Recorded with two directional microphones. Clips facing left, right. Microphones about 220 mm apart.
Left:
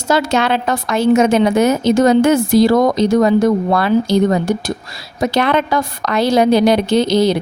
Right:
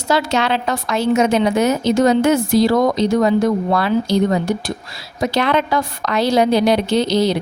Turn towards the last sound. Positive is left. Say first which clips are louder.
# left 3 dB
turn(degrees=50)  # may be behind; listen again after turning